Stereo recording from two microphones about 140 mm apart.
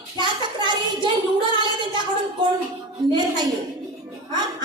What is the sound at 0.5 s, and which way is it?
Child singing, 35° right (ahead or behind).